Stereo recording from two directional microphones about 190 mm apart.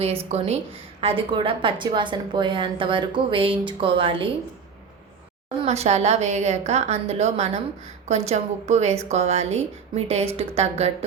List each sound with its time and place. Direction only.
0.0 s a woman's voice: 35° right (ahead or behind)
5.6 s a woman's voice: 35° right (ahead or behind)